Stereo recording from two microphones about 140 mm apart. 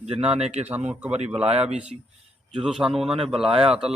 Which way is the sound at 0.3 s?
50° right (ahead or behind).